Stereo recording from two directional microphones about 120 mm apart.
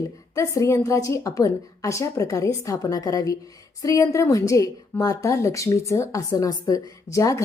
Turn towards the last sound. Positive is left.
turn(degrees=25)  # may be behind; listen again after turning